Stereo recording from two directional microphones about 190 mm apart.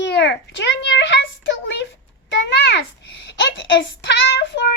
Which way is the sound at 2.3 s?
65° left (ahead or behind).